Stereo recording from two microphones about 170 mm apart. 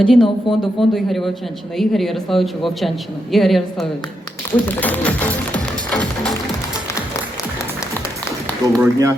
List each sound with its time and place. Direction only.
0.0 s speech: 5° left (ahead or behind)
5.9 s music: 5° left (ahead or behind)
8.6 s speech: 20° right (ahead or behind)